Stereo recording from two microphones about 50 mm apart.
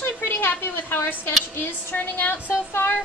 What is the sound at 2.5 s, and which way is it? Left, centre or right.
Female singing, left.